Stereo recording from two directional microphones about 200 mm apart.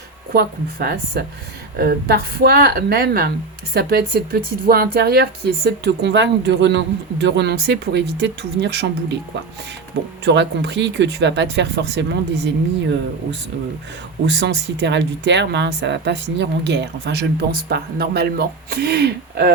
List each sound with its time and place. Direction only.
0.3 s a woman's voice: 55° right (ahead or behind)
10.2 s a woman's voice: 60° right (ahead or behind)
14.3 s a woman's voice: 60° right (ahead or behind)